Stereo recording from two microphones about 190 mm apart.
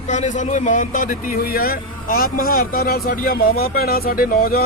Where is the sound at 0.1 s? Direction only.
40° left (ahead or behind).